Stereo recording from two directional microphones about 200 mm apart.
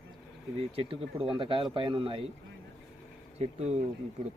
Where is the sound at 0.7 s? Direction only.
25° right (ahead or behind).